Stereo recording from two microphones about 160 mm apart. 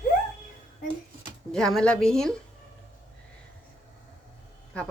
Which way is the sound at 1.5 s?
5° left (ahead or behind).